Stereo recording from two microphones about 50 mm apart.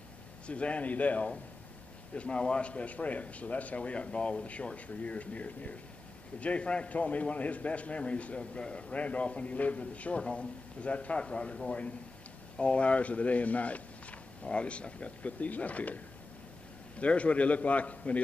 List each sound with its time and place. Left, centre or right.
0.5 s a man's voice: left
17.0 s a man's voice: left